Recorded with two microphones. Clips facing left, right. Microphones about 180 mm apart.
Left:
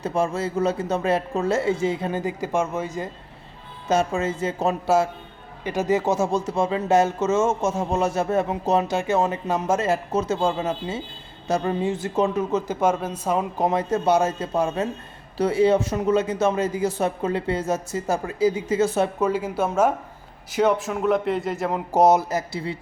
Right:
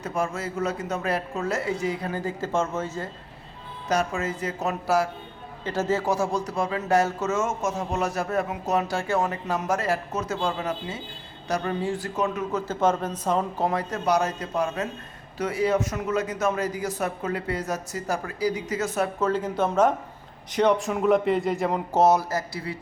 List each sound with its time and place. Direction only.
0.0 s speech: 30° left (ahead or behind); by 3.1 s 15° left (ahead or behind)
3.8 s speech: 25° left (ahead or behind)
5.6 s speech: 15° left (ahead or behind)
12.8 s a woman's voice: 10° left (ahead or behind)
13.7 s speech: 25° left (ahead or behind)
19.2 s a woman's voice: 10° left (ahead or behind)
21.9 s speech: 20° left (ahead or behind)